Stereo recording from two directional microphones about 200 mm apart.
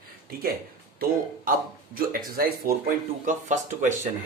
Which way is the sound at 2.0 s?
45° right (ahead or behind).